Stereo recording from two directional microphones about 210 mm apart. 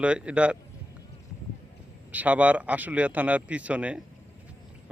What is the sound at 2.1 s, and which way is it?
A man's voice, 5° right (ahead or behind).